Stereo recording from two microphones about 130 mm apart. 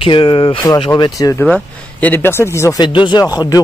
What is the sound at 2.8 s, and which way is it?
Speech, 40° left (ahead or behind).